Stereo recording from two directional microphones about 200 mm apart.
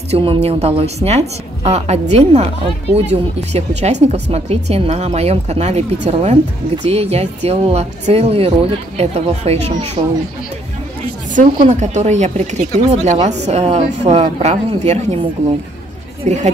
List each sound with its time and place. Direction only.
0.1 s a woman's voice: 30° right (ahead or behind)
11.3 s a woman's voice: 35° right (ahead or behind)
16.3 s a woman's voice: 35° right (ahead or behind)